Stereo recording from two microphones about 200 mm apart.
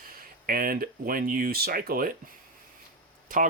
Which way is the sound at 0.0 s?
45° right (ahead or behind).